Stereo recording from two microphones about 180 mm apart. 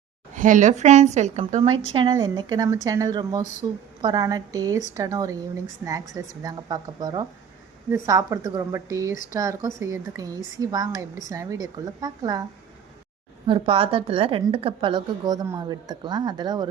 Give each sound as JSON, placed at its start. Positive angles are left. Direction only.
{"t": 0.3, "sound": "a woman's voice", "side_deg": -45}
{"t": 13.5, "sound": "a woman's voice", "side_deg": -30}